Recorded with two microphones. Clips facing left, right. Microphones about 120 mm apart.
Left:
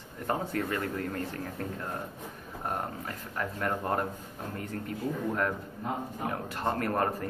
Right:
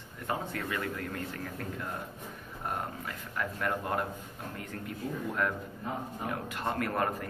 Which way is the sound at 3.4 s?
35° left (ahead or behind).